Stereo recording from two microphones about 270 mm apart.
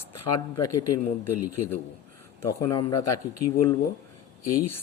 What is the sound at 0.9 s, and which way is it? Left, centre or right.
Speech, left.